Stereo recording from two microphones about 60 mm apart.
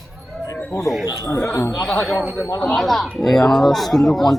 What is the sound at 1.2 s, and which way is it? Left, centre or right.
Speech, left.